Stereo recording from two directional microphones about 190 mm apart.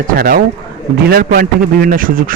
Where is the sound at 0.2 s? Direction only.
50° right (ahead or behind).